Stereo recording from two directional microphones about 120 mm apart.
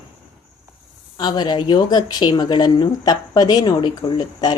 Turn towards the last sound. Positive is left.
turn(degrees=35)  # may be behind; listen again after turning